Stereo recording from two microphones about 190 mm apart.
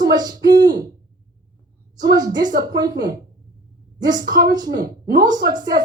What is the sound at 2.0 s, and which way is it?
A woman's voice, 20° right (ahead or behind).